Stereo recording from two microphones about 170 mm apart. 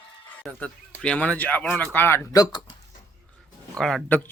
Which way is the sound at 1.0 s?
5° left (ahead or behind).